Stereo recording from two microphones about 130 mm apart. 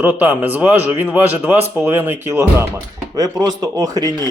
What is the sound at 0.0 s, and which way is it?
A man's voice, 15° right (ahead or behind).